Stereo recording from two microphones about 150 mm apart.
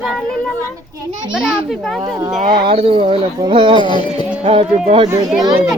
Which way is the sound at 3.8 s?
30° left (ahead or behind).